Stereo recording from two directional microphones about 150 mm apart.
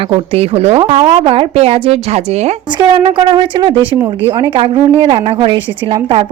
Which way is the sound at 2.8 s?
30° right (ahead or behind).